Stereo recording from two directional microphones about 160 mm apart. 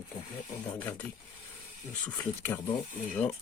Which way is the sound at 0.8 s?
10° left (ahead or behind).